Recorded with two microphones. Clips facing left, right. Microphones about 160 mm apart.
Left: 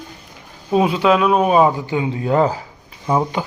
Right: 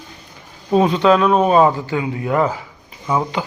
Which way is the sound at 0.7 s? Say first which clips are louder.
Right 1 dB; 5° left (ahead or behind).